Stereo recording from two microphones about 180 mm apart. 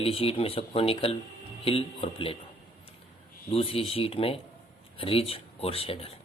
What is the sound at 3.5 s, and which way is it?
Speech, 30° left (ahead or behind).